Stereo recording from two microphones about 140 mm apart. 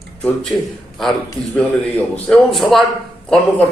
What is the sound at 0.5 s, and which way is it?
Speech, 25° left (ahead or behind).